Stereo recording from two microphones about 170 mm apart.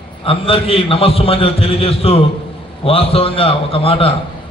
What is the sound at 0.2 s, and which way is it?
A man's voice, 35° left (ahead or behind).